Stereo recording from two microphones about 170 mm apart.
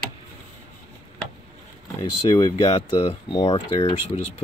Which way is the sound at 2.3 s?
20° left (ahead or behind).